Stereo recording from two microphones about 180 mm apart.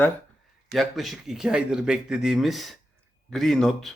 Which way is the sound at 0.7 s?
Centre (ahead or behind).